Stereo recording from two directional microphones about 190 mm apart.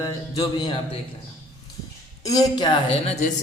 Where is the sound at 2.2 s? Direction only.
20° left (ahead or behind).